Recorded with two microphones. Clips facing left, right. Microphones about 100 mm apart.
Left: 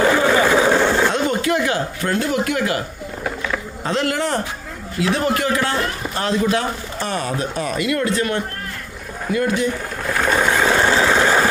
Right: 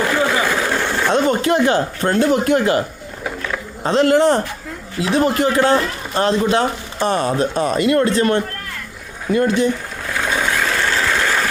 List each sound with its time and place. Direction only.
0.0 s vehicle: centre (ahead or behind)
0.5 s a sound: 10° left (ahead or behind)
1.1 s speech: 35° right (ahead or behind)
3.8 s a man's voice: 30° right (ahead or behind)
10.2 s vehicle: 5° left (ahead or behind)
10.7 s a sound: 30° left (ahead or behind)
10.9 s engine: 20° left (ahead or behind)